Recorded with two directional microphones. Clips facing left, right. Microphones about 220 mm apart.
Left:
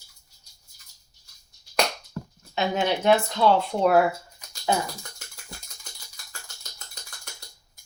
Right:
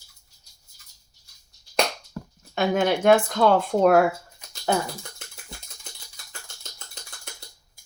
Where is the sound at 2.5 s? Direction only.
50° right (ahead or behind).